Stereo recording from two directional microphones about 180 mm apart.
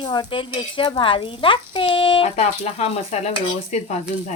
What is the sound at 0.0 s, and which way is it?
Speech, 25° left (ahead or behind).